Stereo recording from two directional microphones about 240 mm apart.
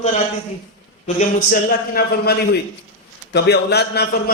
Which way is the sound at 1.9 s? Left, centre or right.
Left.